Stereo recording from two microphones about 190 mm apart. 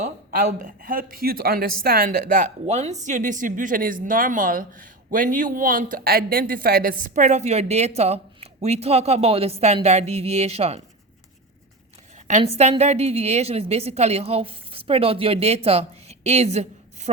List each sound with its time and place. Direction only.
0.0 s speech: 40° right (ahead or behind)
12.3 s a woman's voice: 35° right (ahead or behind)